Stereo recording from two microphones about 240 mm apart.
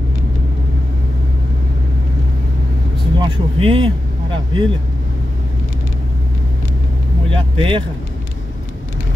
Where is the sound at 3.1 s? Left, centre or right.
Centre.